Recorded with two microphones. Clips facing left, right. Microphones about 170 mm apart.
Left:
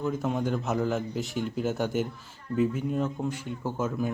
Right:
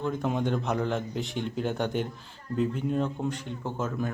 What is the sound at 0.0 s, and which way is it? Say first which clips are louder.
Speech: even; 5° left (ahead or behind).